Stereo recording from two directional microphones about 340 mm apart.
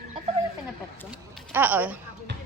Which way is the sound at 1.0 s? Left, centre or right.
Centre.